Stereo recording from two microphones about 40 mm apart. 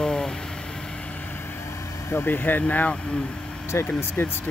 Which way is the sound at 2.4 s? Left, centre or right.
Left.